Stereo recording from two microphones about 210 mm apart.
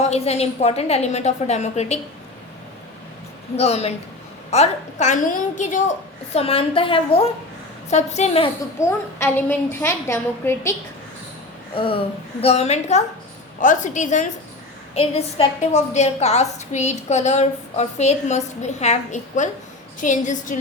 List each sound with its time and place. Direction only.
0.0 s a woman's voice: 30° left (ahead or behind)
3.6 s a woman's voice: 30° left (ahead or behind)
8.8 s a woman's voice: 10° left (ahead or behind)
11.7 s a sound: 25° left (ahead or behind)
12.4 s a woman's voice: 30° left (ahead or behind)